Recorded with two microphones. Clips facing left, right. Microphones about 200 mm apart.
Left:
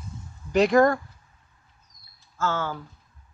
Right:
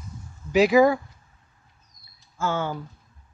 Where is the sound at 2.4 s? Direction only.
15° right (ahead or behind).